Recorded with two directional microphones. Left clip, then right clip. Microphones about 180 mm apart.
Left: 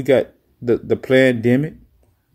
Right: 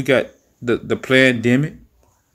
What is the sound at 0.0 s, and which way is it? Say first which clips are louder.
Speech: left 1 dB; 30° left (ahead or behind).